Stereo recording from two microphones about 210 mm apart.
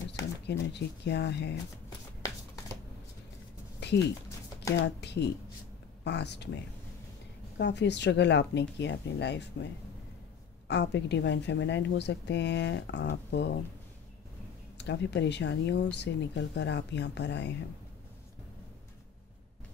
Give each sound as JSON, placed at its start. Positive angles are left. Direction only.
{"t": 0.5, "sound": "speech", "side_deg": 55}
{"t": 2.2, "sound": "shuffling cards", "side_deg": 15}
{"t": 3.8, "sound": "a sound", "side_deg": 55}
{"t": 4.8, "sound": "speech", "side_deg": 55}
{"t": 10.7, "sound": "speech", "side_deg": 55}
{"t": 14.8, "sound": "speech", "side_deg": 55}